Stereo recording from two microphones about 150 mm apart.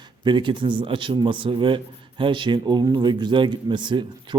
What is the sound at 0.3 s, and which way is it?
A man's voice, 30° right (ahead or behind).